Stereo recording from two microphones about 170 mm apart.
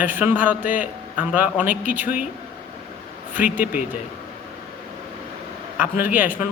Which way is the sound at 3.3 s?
10° right (ahead or behind).